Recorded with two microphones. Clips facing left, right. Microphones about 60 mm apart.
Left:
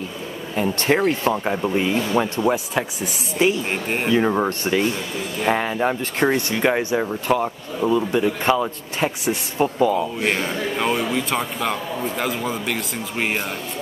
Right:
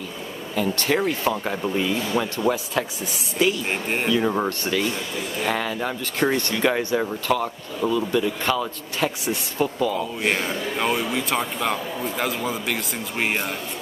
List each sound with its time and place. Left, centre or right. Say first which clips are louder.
0.6 s speech: left 3 dB; left
3.7 s a man's voice: left 1 dB; centre
4.1 s speech: left 4 dB; left
10.2 s a man's voice: left 2 dB; centre